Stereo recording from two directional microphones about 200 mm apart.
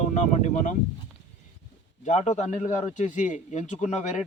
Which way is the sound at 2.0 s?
35° left (ahead or behind).